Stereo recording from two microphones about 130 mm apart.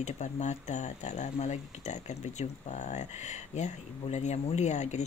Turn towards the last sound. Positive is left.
turn(degrees=65)  # may be behind; listen again after turning